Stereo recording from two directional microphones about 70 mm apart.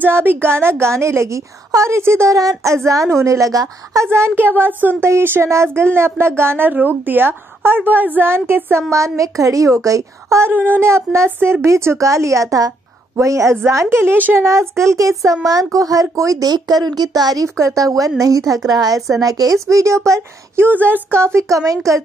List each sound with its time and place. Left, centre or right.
0.0 s speech: right
2.3 s a woman's voice: right
4.1 s speech: right
8.9 s a woman's voice: right
10.4 s speech: right
11.2 s a woman's voice: right
11.6 s a woman's voice: right
13.1 s a woman's voice: right
13.8 s a woman's voice: right
17.6 s a woman's voice: right
20.7 s a woman's voice: right
21.2 s a woman's voice: right